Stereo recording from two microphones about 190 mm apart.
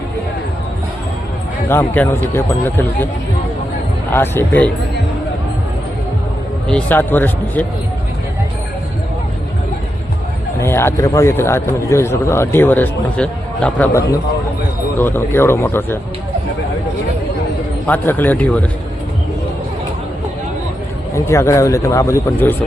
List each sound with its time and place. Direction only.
1.7 s a man's voice: 10° left (ahead or behind)
4.1 s a man's voice: 10° left (ahead or behind)
6.7 s a man's voice: 5° left (ahead or behind)
10.6 s a man's voice: 15° left (ahead or behind)
17.8 s a man's voice: 10° left (ahead or behind)
21.2 s a man's voice: 15° left (ahead or behind)